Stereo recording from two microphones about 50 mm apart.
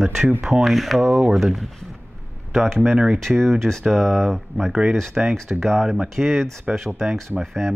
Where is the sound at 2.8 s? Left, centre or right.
Centre.